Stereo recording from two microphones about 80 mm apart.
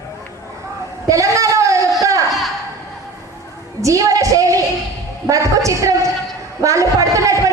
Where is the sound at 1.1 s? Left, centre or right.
Right.